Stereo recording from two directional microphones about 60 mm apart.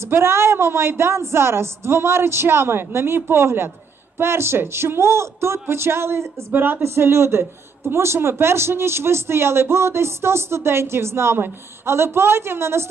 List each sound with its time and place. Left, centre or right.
0.0 s speech: right
6.5 s speech: right
6.8 s speech: right